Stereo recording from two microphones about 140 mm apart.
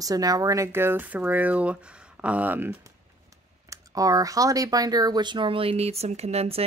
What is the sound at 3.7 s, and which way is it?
Speech, 25° right (ahead or behind).